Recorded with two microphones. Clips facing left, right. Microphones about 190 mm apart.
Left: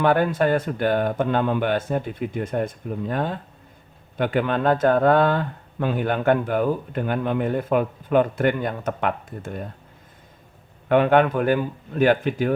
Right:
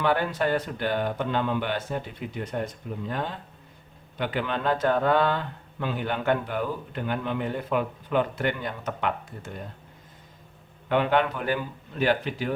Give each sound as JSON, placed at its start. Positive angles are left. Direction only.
{"t": 0.0, "sound": "speech", "side_deg": 50}
{"t": 10.8, "sound": "speech", "side_deg": 50}